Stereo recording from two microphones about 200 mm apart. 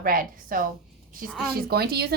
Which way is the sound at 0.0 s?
45° right (ahead or behind).